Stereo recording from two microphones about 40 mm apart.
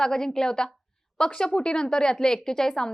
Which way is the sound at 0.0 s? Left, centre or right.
Centre.